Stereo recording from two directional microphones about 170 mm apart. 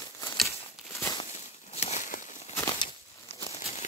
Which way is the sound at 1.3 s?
45° left (ahead or behind).